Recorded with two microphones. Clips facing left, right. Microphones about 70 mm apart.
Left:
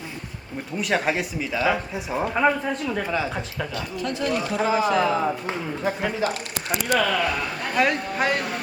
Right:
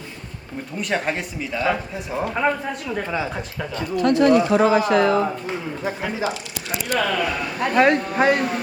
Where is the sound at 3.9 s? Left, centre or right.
Right.